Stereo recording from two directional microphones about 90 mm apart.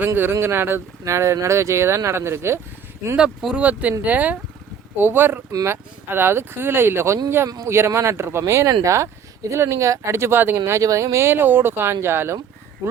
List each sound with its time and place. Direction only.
0.0 s speech: 25° right (ahead or behind)
3.2 s speech: 5° right (ahead or behind); by 10.6 s 25° right (ahead or behind)
10.7 s speech: 35° right (ahead or behind)